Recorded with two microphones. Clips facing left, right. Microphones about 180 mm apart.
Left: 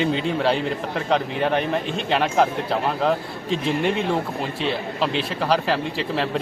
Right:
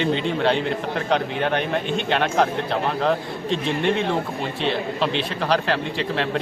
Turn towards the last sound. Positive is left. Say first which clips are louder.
# even
turn(degrees=5)  # may be behind; listen again after turning